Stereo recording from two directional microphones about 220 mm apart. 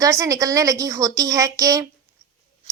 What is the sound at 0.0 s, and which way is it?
A woman's voice, 15° right (ahead or behind).